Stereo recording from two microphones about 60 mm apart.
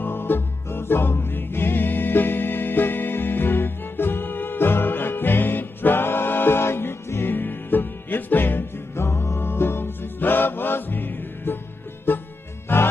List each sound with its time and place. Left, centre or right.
0.0 s music: left